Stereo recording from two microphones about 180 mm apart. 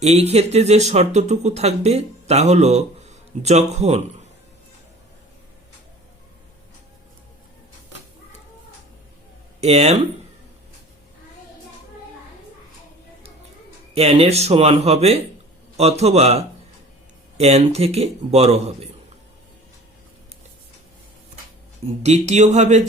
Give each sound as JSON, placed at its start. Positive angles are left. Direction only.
{"t": 0.0, "sound": "speech", "side_deg": -35}
{"t": 9.6, "sound": "speech", "side_deg": -35}
{"t": 13.9, "sound": "speech", "side_deg": -35}
{"t": 22.0, "sound": "speech", "side_deg": -40}